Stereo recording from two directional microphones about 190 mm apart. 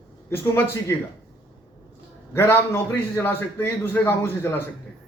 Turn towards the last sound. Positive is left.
turn(degrees=10)  # may be behind; listen again after turning